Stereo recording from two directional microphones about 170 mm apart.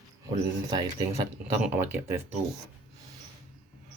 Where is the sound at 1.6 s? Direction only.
10° right (ahead or behind).